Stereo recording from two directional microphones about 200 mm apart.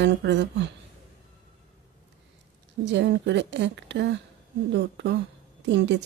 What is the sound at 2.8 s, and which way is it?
A woman's voice, 60° right (ahead or behind).